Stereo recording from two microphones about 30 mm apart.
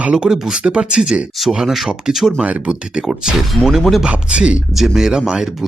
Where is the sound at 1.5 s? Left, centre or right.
Centre.